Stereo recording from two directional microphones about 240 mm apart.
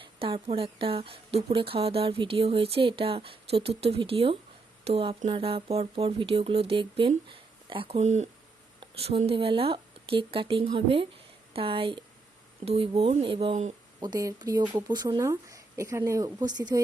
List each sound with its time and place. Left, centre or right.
0.0 s a woman's voice: right
14.0 s speech: centre